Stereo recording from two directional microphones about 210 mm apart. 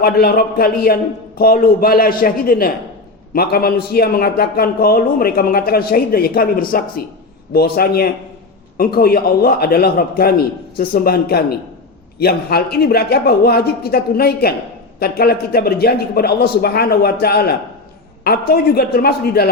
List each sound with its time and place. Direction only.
0.0 s a man's voice: 45° left (ahead or behind)